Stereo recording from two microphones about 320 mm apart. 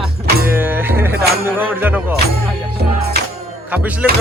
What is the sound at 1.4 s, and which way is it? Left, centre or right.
Speech, centre.